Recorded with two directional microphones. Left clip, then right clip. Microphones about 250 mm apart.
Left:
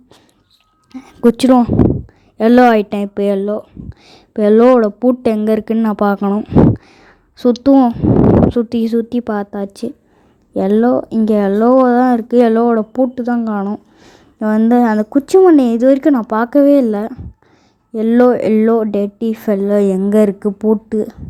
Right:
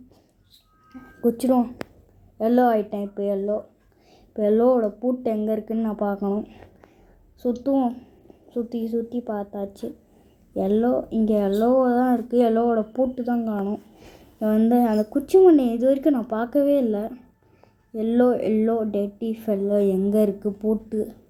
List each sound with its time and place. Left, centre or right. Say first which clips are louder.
0.9 s a woman's voice: left 11 dB; left